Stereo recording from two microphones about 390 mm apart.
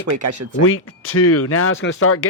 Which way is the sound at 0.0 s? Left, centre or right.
Right.